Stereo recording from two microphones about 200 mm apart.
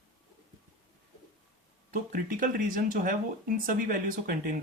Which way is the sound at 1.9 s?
45° right (ahead or behind).